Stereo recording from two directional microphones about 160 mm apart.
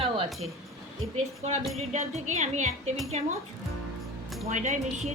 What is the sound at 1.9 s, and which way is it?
Speech, 45° right (ahead or behind).